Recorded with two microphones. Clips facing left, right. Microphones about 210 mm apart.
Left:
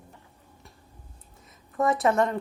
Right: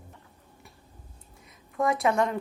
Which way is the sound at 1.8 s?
Centre (ahead or behind).